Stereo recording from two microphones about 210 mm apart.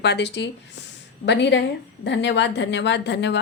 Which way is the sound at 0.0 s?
55° left (ahead or behind).